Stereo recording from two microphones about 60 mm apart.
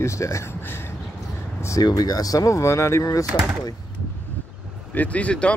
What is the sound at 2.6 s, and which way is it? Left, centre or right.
Speech, left.